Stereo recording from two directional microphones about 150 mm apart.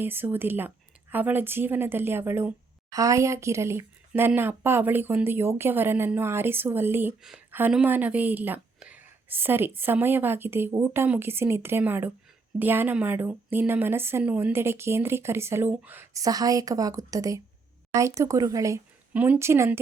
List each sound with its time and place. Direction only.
0.0 s speech: 15° right (ahead or behind)
7.2 s a woman's voice: 5° right (ahead or behind)